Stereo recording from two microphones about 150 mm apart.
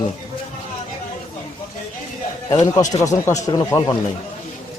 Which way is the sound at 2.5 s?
25° left (ahead or behind).